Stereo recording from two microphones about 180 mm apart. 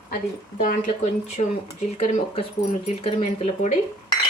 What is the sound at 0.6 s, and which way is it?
Speech, 45° left (ahead or behind).